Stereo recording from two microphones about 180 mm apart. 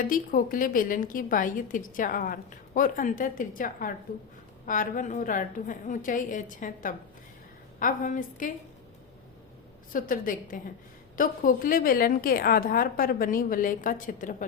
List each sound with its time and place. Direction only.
0.0 s a woman's voice: 50° left (ahead or behind)
9.9 s a woman's voice: 50° left (ahead or behind)